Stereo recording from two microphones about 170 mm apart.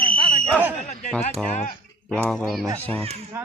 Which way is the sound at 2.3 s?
Centre (ahead or behind).